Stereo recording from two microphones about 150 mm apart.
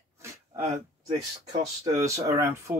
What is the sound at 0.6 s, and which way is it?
Speech, 50° right (ahead or behind).